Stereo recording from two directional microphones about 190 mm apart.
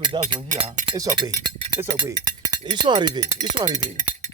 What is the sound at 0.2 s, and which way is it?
Speech, 40° right (ahead or behind).